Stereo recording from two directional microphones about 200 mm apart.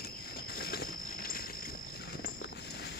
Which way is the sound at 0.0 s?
50° left (ahead or behind).